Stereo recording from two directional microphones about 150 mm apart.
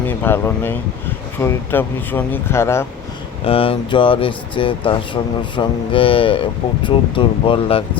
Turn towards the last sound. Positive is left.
turn(degrees=40)  # may be behind; listen again after turning